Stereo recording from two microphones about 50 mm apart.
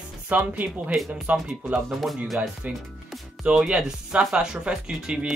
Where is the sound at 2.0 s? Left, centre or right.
Centre.